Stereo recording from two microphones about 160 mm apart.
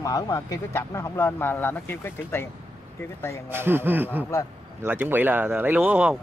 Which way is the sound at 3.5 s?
15° right (ahead or behind).